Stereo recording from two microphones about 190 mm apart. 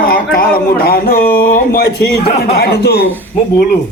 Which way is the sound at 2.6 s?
60° left (ahead or behind).